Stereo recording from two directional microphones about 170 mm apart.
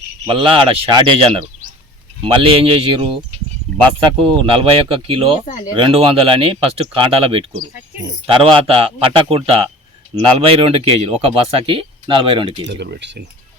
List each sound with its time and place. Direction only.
0.3 s speech: 30° right (ahead or behind)
4.5 s speech: 35° right (ahead or behind)
12.6 s speech: 85° right